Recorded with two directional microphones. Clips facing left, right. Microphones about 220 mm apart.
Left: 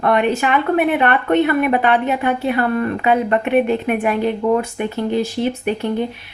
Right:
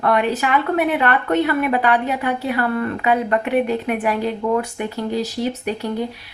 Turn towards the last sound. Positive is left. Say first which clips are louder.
# left 4 dB
turn(degrees=25)  # may be behind; listen again after turning